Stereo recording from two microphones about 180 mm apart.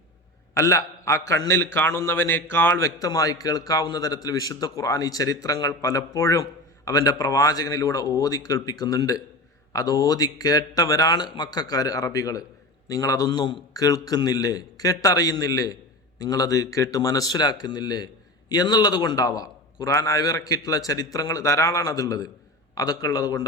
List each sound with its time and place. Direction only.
0.5 s a man's voice: 15° left (ahead or behind)